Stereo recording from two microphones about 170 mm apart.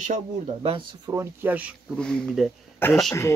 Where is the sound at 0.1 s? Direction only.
35° right (ahead or behind); by 2.0 s 10° right (ahead or behind).